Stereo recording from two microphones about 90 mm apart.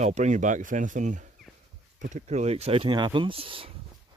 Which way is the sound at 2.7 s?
90° right.